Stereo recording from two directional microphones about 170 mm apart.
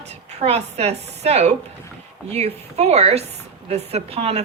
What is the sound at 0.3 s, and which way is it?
Speech, 40° right (ahead or behind).